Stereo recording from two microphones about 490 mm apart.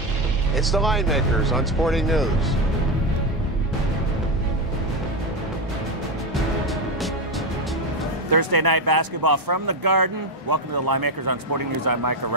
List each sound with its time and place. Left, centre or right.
0.6 s speech: centre
8.3 s speech: right